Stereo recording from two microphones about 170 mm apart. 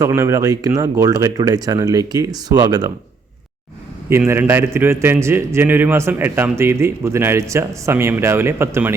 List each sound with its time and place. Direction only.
0.0 s speech: 15° right (ahead or behind)
4.3 s a man's voice: 15° right (ahead or behind)